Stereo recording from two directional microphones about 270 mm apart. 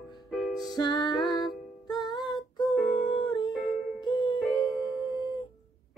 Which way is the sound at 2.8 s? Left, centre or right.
Centre.